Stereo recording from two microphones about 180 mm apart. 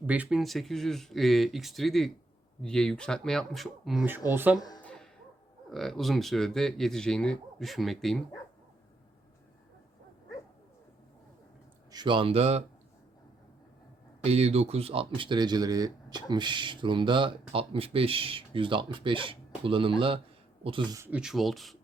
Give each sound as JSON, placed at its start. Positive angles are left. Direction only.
{"t": 0.0, "sound": "speech", "side_deg": -10}
{"t": 4.3, "sound": "speech", "side_deg": -10}
{"t": 4.5, "sound": "speech", "side_deg": 20}
{"t": 4.8, "sound": "a sound", "side_deg": 5}
{"t": 5.7, "sound": "speech", "side_deg": 0}
{"t": 11.9, "sound": "speech", "side_deg": -25}
{"t": 14.3, "sound": "speech", "side_deg": -35}
{"t": 21.0, "sound": "speech", "side_deg": -5}